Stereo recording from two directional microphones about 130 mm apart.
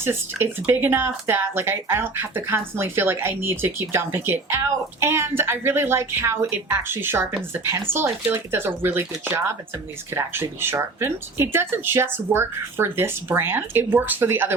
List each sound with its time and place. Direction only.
0.0 s speech: 20° right (ahead or behind)